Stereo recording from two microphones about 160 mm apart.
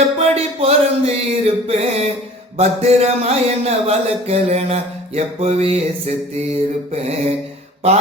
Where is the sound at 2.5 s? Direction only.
40° right (ahead or behind).